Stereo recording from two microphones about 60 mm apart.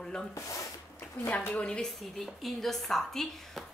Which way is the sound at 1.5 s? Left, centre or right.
Centre.